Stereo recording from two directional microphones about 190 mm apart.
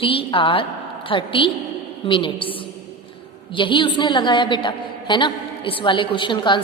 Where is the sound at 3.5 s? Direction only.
25° left (ahead or behind).